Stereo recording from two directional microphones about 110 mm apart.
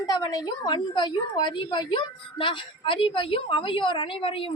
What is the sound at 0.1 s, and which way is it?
A woman's voice, 40° left (ahead or behind).